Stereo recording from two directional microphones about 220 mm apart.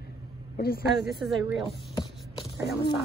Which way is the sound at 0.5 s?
45° left (ahead or behind).